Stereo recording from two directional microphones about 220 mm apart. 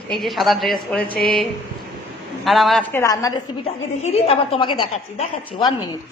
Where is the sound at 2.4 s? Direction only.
Centre (ahead or behind).